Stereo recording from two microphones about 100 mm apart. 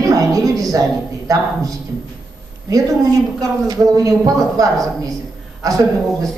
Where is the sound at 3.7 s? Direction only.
35° right (ahead or behind).